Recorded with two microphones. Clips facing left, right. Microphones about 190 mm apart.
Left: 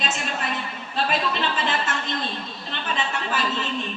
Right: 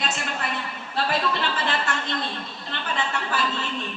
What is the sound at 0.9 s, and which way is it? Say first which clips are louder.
A woman's voice: even; 20° left (ahead or behind).